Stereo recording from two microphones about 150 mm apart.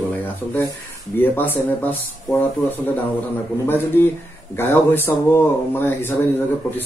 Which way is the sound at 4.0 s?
15° left (ahead or behind).